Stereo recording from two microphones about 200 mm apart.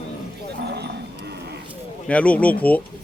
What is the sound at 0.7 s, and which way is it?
Livestock, 55° right (ahead or behind).